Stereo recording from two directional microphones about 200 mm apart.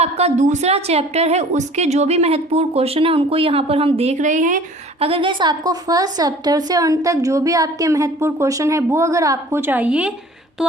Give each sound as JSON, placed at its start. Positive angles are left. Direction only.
{"t": 0.0, "sound": "a woman's voice", "side_deg": -30}
{"t": 5.0, "sound": "a woman's voice", "side_deg": -25}
{"t": 10.6, "sound": "a sound", "side_deg": 0}